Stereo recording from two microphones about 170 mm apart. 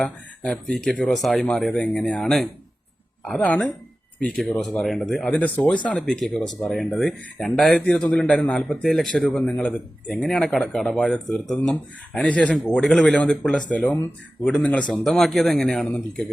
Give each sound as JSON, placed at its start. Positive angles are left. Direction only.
{"t": 0.0, "sound": "speech", "side_deg": 5}